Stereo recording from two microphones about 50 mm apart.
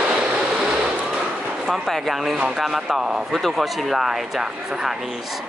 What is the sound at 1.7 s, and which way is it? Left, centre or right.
Speech, centre.